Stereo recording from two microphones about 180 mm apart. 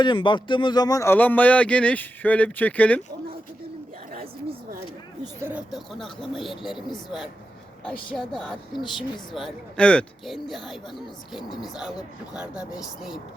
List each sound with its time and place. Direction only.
0.0 s speech: 25° left (ahead or behind); by 3.0 s 10° left (ahead or behind)
5.2 s speech: 10° right (ahead or behind)
8.8 s speech: 25° left (ahead or behind)
9.3 s speech: 5° left (ahead or behind)